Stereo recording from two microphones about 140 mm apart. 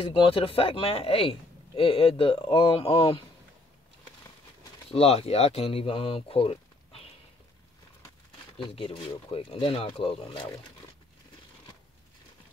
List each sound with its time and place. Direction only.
0.0 s speech: 40° left (ahead or behind)
4.9 s speech: 45° left (ahead or behind)
8.5 s speech: 35° left (ahead or behind)